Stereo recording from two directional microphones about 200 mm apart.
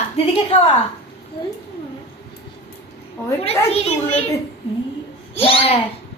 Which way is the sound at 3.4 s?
30° left (ahead or behind).